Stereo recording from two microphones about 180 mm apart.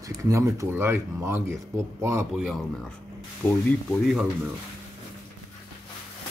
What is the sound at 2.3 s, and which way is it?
A man's voice, centre (ahead or behind).